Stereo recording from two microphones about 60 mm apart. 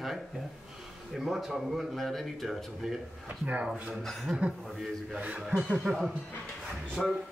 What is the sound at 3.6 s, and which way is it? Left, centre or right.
Speech, centre.